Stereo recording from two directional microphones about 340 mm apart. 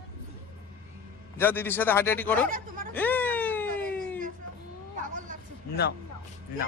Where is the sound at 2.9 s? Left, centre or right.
Centre.